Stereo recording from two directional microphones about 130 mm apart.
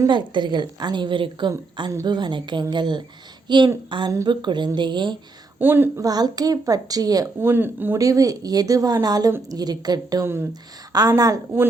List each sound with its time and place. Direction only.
0.1 s a woman's voice: 35° right (ahead or behind)
5.5 s a woman's voice: 15° right (ahead or behind)
6.1 s speech: 30° right (ahead or behind)
7.5 s a woman's voice: 15° right (ahead or behind)
7.9 s speech: 25° right (ahead or behind)